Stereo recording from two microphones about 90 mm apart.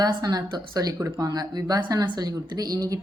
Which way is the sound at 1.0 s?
35° right (ahead or behind).